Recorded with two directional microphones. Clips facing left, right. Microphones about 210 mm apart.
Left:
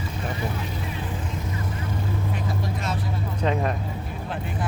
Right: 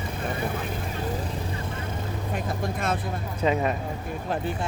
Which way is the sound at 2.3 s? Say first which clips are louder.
Even; 50° right (ahead or behind).